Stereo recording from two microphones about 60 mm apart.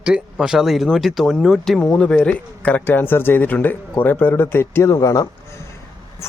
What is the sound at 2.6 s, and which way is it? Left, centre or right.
Speech, left.